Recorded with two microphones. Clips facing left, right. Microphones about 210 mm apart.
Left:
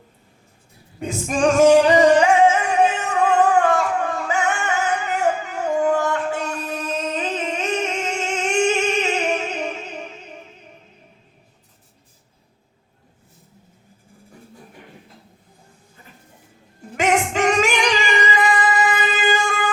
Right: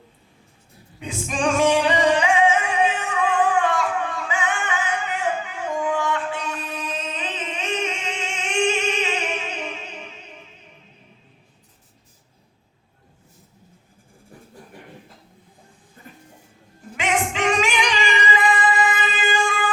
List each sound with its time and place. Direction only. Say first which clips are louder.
0.9 s music: left 5 dB; 40° left (ahead or behind)
17.0 s music: left 4 dB; 40° left (ahead or behind)